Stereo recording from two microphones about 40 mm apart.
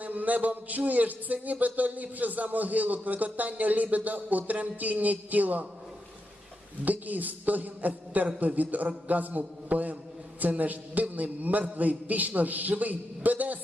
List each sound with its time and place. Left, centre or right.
0.0 s a man's voice: right
6.8 s a man's voice: right